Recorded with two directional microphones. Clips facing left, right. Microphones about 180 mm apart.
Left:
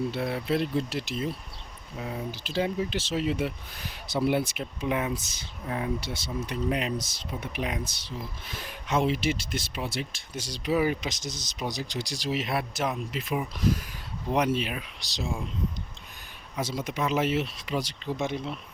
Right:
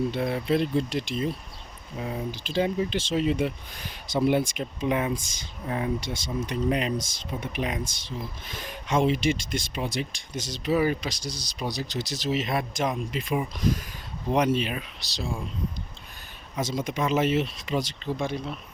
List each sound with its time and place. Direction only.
0.1 s speech: 5° left (ahead or behind)
15.0 s speech: 20° left (ahead or behind)
16.6 s speech: 10° left (ahead or behind)